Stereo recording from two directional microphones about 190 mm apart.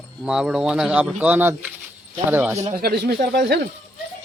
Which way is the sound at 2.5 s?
35° right (ahead or behind).